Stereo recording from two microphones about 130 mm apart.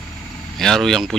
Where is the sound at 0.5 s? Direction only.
5° left (ahead or behind).